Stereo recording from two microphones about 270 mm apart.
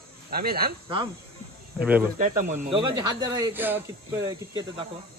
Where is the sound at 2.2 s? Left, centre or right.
Right.